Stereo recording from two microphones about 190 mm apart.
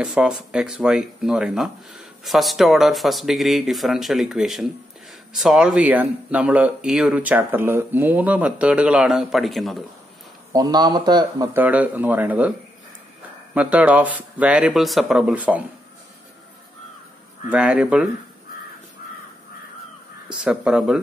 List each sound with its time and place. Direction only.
0.0 s speech: 5° right (ahead or behind)
10.5 s speech: 20° right (ahead or behind)
11.6 s speech: 10° right (ahead or behind)
13.6 s speech: 5° right (ahead or behind)
17.5 s speech: 5° right (ahead or behind)
20.2 s speech: 5° right (ahead or behind)